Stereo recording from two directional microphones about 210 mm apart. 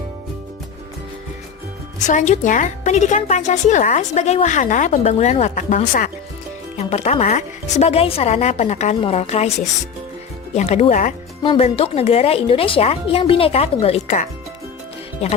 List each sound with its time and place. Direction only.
2.0 s a woman's voice: 35° left (ahead or behind)
10.5 s speech: 30° left (ahead or behind)